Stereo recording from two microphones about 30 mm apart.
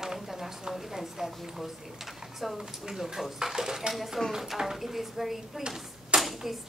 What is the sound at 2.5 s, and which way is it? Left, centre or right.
A woman's voice, centre.